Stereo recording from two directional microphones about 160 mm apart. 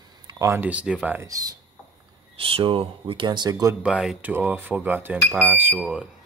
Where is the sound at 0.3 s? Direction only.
20° right (ahead or behind).